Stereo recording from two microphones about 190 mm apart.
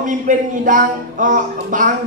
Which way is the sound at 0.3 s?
45° right (ahead or behind).